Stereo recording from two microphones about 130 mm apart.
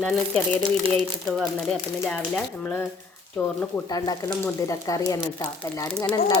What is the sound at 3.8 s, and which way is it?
Speech, 30° left (ahead or behind).